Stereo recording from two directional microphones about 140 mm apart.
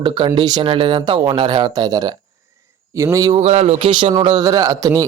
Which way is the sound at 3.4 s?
50° right (ahead or behind).